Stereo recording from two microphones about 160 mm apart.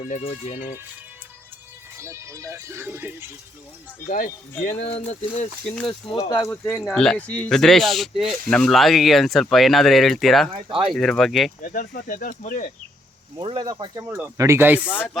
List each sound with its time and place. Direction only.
0.0 s speech: 50° left (ahead or behind)
2.0 s speech: 15° right (ahead or behind)
4.1 s speech: 55° left (ahead or behind); by 6.5 s 25° left (ahead or behind)
6.8 s speech: 5° left (ahead or behind)
10.5 s speech: 30° right (ahead or behind)
10.9 s speech: centre (ahead or behind)
11.6 s speech: 60° left (ahead or behind)
13.3 s speech: 30° right (ahead or behind)
14.1 s speech: 15° right (ahead or behind)
15.1 s speech: centre (ahead or behind)